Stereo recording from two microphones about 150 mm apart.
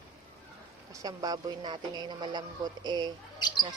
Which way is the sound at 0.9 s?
25° right (ahead or behind).